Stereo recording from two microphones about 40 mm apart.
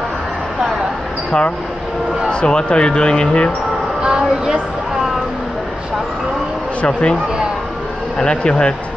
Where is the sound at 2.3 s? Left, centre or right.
Left.